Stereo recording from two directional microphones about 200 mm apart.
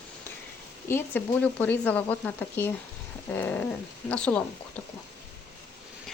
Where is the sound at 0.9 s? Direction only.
10° left (ahead or behind).